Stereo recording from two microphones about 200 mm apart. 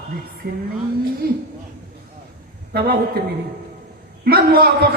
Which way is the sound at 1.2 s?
50° right (ahead or behind).